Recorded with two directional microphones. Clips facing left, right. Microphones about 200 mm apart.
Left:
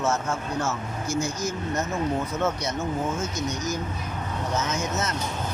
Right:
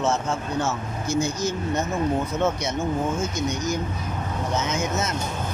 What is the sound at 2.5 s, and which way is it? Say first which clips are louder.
Speech: right 3 dB; 25° right (ahead or behind).